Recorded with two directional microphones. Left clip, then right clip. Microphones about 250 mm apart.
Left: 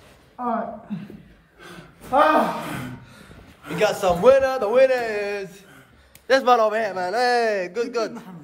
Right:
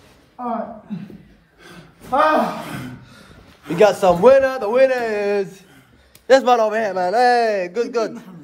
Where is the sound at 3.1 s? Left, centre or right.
Centre.